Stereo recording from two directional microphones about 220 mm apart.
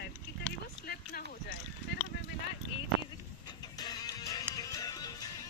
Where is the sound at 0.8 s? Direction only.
45° left (ahead or behind).